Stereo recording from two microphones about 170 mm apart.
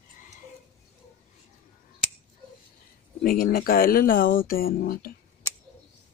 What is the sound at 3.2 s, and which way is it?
Speech, 55° left (ahead or behind).